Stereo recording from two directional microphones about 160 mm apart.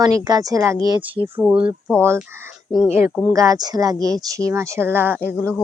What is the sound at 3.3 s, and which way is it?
Speech, 20° right (ahead or behind).